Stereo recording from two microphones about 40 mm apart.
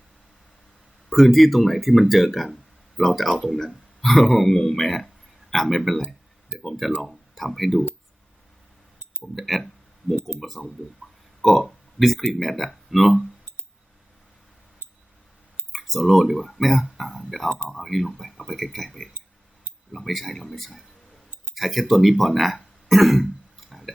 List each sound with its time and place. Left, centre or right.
1.1 s speech: centre
9.4 s speech: centre
10.2 s speech: right
10.4 s speech: centre
15.7 s speech: centre
20.1 s speech: centre
22.9 s cough: centre